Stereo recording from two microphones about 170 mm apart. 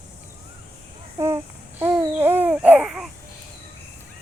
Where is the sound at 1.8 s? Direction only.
15° right (ahead or behind).